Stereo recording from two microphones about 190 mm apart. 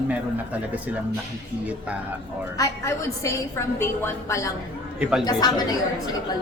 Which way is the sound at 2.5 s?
15° left (ahead or behind).